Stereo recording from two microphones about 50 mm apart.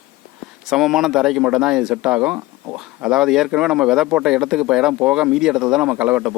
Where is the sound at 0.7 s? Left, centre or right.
Centre.